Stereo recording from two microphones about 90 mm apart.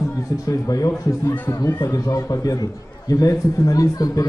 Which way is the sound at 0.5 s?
40° left (ahead or behind).